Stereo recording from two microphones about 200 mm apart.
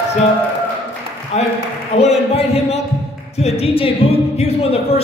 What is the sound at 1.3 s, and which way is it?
A man's voice, 30° left (ahead or behind).